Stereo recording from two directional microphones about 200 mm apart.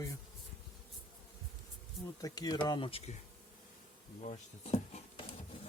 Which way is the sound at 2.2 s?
20° left (ahead or behind).